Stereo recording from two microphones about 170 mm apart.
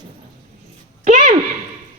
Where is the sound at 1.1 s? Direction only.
50° right (ahead or behind).